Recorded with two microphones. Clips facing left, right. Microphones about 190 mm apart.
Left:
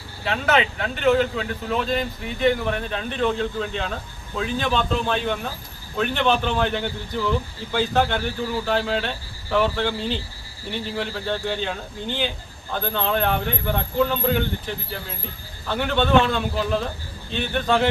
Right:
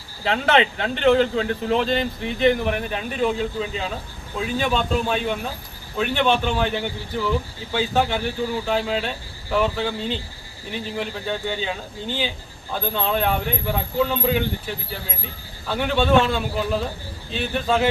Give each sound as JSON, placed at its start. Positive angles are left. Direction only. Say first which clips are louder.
{"t": 0.3, "sound": "a man's voice", "louder": "right 2 dB", "side_deg": -30}
{"t": 15.7, "sound": "speech", "louder": "right 1 dB", "side_deg": -5}